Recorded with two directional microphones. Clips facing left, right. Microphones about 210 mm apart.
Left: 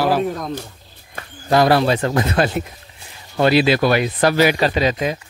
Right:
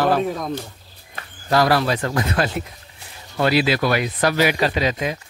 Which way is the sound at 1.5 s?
25° left (ahead or behind).